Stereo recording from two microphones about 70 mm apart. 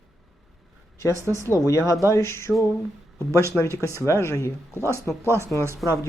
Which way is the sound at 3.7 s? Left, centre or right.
Right.